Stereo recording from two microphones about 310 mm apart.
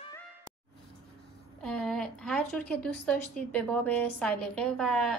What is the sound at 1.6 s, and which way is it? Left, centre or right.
A woman's voice, centre.